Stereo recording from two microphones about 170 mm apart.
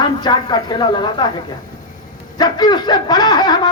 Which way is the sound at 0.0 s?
25° left (ahead or behind).